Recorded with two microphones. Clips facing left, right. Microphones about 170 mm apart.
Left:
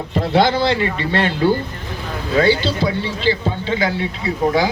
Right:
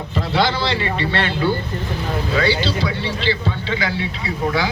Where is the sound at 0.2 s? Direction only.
50° left (ahead or behind).